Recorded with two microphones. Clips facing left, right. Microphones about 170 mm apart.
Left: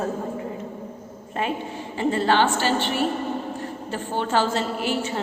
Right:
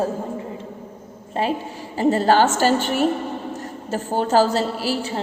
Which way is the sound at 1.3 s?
30° right (ahead or behind).